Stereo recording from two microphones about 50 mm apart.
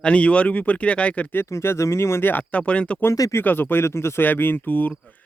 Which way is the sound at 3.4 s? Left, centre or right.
Left.